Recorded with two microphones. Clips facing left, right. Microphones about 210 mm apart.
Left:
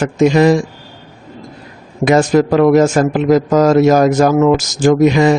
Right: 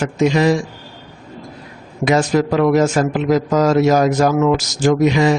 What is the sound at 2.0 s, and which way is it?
A man's voice, 45° left (ahead or behind).